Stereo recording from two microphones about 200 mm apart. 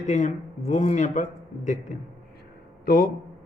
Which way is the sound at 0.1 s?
35° left (ahead or behind).